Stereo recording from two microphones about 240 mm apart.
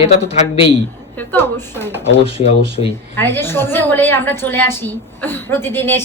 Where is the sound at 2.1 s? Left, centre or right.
Left.